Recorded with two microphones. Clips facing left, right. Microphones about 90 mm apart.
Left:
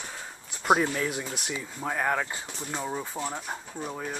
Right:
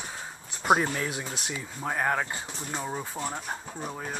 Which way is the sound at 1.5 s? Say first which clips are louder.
Right 1 dB; 10° right (ahead or behind).